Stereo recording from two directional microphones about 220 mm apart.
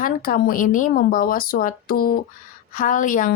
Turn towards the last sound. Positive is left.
turn(degrees=35)  # may be behind; listen again after turning